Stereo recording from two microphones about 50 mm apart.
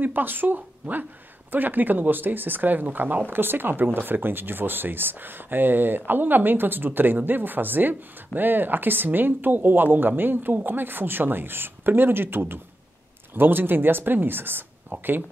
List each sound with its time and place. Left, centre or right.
0.0 s a woman's voice: right